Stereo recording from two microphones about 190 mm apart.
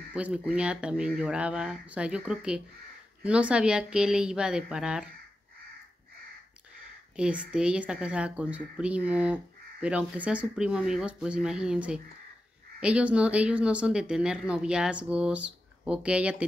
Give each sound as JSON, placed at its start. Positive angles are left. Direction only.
{"t": 0.1, "sound": "speech", "side_deg": -5}
{"t": 7.2, "sound": "speech", "side_deg": -5}